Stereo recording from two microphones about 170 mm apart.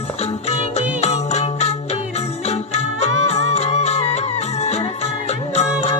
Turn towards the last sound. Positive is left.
turn(degrees=40)  # may be behind; listen again after turning